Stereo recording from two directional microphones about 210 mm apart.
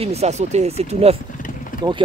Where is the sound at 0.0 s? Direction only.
30° right (ahead or behind).